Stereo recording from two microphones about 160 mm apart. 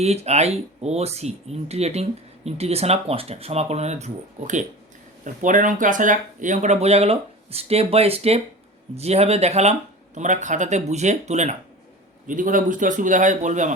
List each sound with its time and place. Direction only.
0.0 s speech: 40° right (ahead or behind)